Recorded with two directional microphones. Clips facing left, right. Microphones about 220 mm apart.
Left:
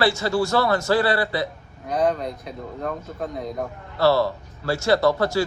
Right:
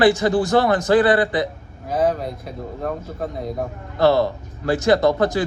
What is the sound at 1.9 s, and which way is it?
Speech, centre (ahead or behind).